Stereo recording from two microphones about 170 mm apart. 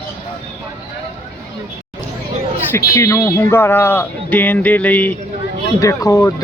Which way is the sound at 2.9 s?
20° left (ahead or behind).